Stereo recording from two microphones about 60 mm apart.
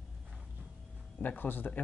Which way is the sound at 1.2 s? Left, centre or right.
Left.